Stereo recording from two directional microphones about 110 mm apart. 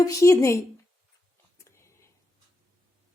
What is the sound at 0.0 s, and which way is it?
Speech, 30° left (ahead or behind).